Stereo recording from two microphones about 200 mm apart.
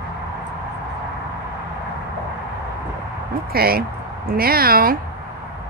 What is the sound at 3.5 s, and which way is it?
Speech, 50° right (ahead or behind).